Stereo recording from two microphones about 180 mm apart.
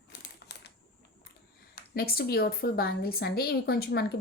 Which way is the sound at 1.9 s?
55° left (ahead or behind).